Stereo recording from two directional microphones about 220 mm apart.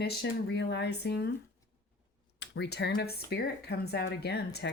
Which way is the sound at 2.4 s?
55° left (ahead or behind).